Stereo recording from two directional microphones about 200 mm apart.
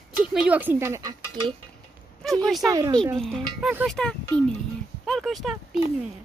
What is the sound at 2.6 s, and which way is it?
Dishes, 15° right (ahead or behind).